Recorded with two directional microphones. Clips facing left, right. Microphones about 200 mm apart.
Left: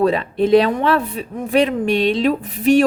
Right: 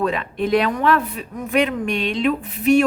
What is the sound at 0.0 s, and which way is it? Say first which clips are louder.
A woman's voice: left 5 dB; 35° left (ahead or behind).